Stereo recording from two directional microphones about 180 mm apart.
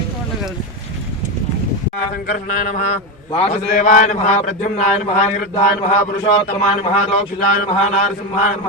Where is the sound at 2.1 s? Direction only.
45° left (ahead or behind).